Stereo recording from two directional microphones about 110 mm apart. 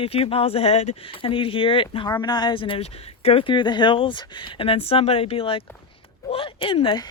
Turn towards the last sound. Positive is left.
turn(degrees=55)  # may be behind; listen again after turning